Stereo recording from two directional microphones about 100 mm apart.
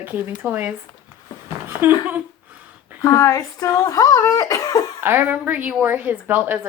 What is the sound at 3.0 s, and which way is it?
Speech, 35° left (ahead or behind).